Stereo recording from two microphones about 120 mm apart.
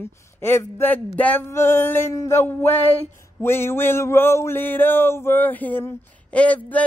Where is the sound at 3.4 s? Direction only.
20° left (ahead or behind).